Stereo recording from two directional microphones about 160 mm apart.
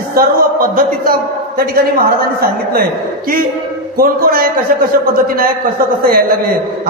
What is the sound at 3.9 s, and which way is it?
A man's voice, 65° right (ahead or behind).